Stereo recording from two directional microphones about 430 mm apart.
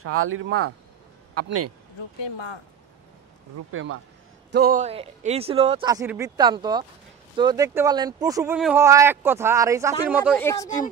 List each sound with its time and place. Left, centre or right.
0.0 s speech: right
2.2 s speech: left
3.7 s speech: right; by 10.9 s centre